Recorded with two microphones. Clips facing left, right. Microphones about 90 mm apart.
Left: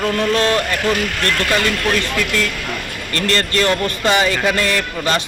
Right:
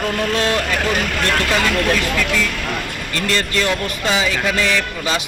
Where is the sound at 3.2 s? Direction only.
5° right (ahead or behind).